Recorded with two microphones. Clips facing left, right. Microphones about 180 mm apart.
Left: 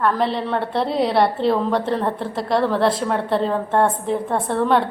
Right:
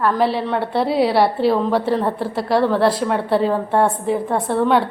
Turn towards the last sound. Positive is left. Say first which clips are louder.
# right 2 dB
turn(degrees=0)  # may be behind; listen again after turning